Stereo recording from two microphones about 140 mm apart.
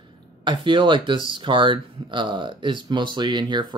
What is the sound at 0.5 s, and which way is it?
Speech, 35° right (ahead or behind).